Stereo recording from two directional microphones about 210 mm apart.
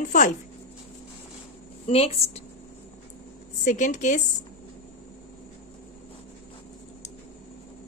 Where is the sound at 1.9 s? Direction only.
30° left (ahead or behind).